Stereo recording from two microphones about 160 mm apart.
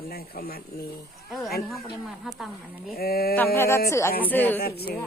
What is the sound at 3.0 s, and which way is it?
Speech, 70° left (ahead or behind).